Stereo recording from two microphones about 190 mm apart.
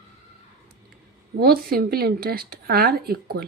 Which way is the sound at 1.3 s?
55° right (ahead or behind).